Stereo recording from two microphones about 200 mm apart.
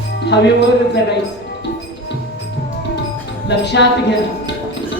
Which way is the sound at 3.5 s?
60° left (ahead or behind).